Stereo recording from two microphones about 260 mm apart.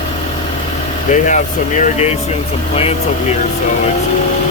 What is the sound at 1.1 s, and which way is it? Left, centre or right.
Speech, left.